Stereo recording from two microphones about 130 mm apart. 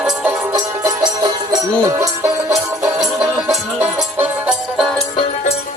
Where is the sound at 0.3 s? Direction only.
25° right (ahead or behind); by 4.9 s 5° right (ahead or behind).